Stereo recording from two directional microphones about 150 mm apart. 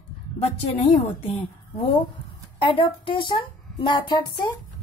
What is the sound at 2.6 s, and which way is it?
A woman's voice, 35° left (ahead or behind).